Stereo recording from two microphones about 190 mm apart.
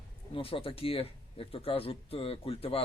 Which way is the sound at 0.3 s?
30° left (ahead or behind).